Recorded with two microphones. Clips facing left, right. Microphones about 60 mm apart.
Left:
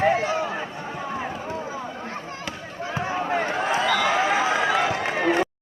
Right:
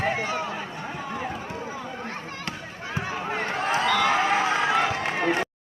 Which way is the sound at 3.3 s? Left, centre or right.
Centre.